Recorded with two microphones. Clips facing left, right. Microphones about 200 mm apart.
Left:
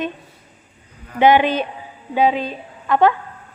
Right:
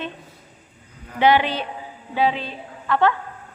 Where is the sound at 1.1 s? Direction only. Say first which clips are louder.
Left 4 dB; 15° left (ahead or behind).